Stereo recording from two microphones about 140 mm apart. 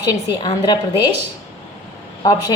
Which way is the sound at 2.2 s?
25° left (ahead or behind).